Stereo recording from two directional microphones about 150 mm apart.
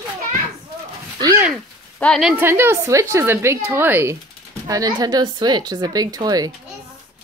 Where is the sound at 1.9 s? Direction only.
5° left (ahead or behind).